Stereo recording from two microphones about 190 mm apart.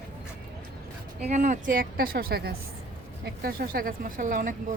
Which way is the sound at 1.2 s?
35° right (ahead or behind).